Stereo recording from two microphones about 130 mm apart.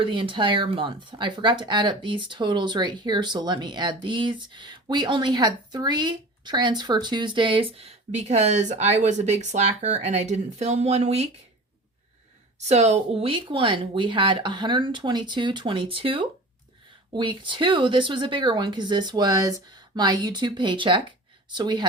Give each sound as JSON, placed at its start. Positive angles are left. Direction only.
{"t": 0.0, "sound": "speech", "side_deg": -40}
{"t": 12.5, "sound": "speech", "side_deg": -60}